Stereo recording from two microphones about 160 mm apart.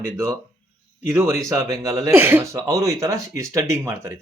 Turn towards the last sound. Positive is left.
turn(degrees=-15)  # may be behind; listen again after turning